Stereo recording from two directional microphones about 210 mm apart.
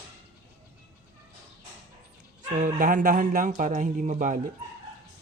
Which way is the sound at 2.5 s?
40° right (ahead or behind).